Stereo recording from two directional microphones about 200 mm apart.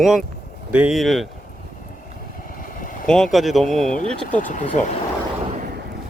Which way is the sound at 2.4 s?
40° left (ahead or behind).